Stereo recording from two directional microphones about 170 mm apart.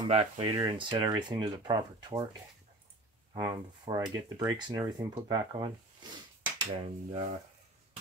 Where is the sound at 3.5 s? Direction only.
25° right (ahead or behind).